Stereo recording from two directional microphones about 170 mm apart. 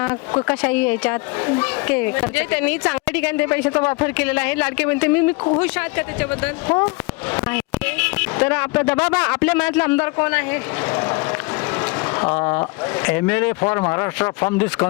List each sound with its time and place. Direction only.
0.4 s speech: 5° left (ahead or behind)